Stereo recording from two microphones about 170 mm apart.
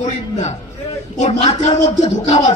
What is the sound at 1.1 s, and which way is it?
A man's voice, 45° left (ahead or behind).